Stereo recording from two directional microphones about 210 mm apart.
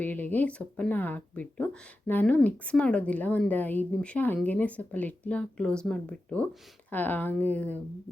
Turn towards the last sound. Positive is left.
turn(degrees=5)  # may be behind; listen again after turning